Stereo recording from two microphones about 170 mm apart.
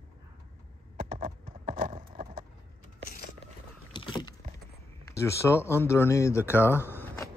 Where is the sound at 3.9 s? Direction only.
30° left (ahead or behind).